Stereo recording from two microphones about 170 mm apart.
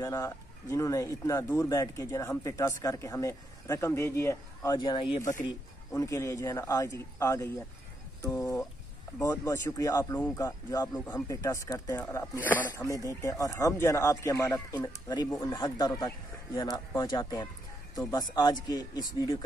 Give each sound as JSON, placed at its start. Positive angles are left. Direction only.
{"t": 0.0, "sound": "speech", "side_deg": 20}